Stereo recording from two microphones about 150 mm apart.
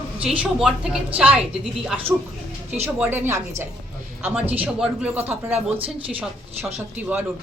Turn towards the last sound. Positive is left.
turn(degrees=-10)  # may be behind; listen again after turning